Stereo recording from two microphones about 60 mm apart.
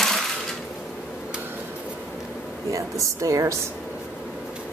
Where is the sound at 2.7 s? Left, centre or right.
Right.